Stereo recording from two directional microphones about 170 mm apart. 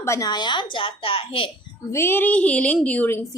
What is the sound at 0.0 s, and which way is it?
A woman's voice, 20° left (ahead or behind).